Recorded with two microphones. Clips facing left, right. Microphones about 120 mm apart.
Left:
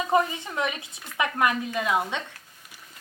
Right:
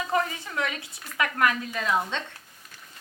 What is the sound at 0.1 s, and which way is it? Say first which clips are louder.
Speech: left 4 dB; 20° left (ahead or behind).